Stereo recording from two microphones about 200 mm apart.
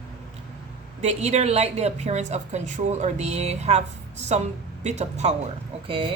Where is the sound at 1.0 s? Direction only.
35° right (ahead or behind).